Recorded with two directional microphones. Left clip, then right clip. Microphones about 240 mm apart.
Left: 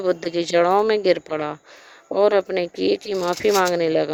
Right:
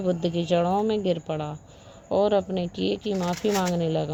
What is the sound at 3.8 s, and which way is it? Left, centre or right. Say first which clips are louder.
Speech: left 7 dB; left.